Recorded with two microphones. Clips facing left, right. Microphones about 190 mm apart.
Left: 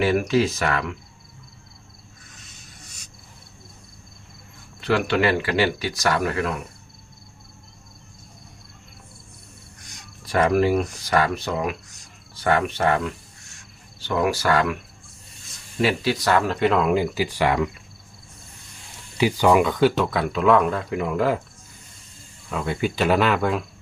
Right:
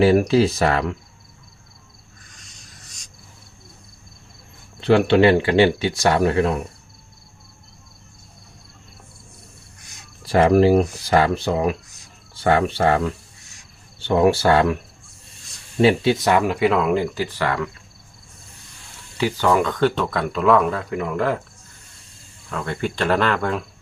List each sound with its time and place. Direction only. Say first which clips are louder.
0.0 s speech: right 5 dB; 30° right (ahead or behind)
4.8 s speech: right 6 dB; 25° right (ahead or behind)
10.2 s speech: right 5 dB; 30° right (ahead or behind)
14.0 s speech: right 6 dB; 25° right (ahead or behind)
15.8 s speech: right 5 dB; 25° right (ahead or behind); by 17.7 s 15° left (ahead or behind)
19.1 s speech: left 1 dB; 15° left (ahead or behind)
22.4 s speech: left 1 dB; 5° left (ahead or behind)